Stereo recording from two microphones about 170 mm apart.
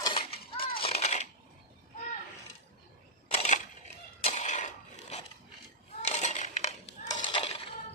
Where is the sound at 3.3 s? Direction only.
45° left (ahead or behind).